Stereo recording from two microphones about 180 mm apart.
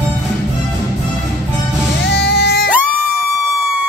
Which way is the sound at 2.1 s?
65° left (ahead or behind).